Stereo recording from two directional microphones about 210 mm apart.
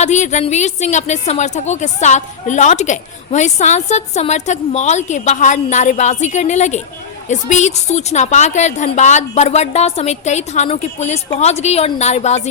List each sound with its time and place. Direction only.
0.0 s a woman's voice: 35° left (ahead or behind)